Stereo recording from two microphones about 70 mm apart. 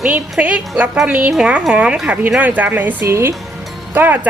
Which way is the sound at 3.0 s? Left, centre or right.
Right.